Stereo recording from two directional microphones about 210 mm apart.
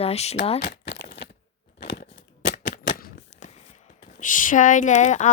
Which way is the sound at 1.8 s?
55° left (ahead or behind).